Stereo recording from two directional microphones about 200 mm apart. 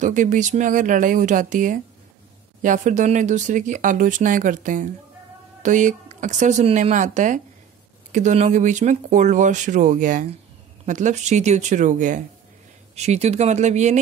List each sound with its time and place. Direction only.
0.0 s speech: 40° right (ahead or behind)